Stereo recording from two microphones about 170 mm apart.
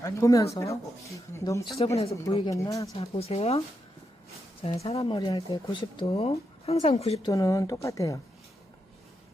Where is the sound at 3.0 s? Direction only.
35° left (ahead or behind).